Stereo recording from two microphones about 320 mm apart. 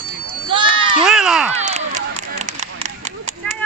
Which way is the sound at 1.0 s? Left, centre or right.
Centre.